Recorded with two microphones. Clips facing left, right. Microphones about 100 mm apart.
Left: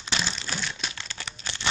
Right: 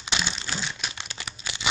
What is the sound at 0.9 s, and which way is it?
Crumpling, 15° right (ahead or behind).